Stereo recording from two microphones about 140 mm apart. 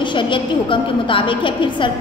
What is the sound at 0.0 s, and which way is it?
A woman's voice, 35° left (ahead or behind).